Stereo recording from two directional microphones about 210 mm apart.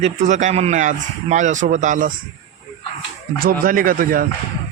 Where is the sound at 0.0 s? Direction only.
35° right (ahead or behind).